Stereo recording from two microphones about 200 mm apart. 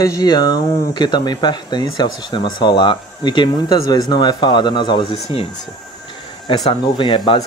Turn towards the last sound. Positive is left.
turn(degrees=20)  # may be behind; listen again after turning